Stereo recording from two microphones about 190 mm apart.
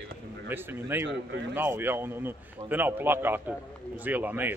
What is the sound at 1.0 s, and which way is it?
Speech, 65° right (ahead or behind).